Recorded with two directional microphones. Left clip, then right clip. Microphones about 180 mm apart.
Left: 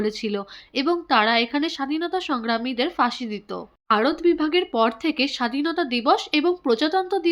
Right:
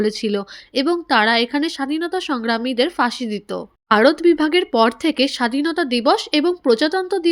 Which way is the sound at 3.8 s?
40° right (ahead or behind).